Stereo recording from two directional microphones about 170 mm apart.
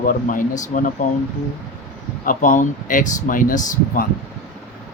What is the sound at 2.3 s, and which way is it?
Speech, 50° left (ahead or behind).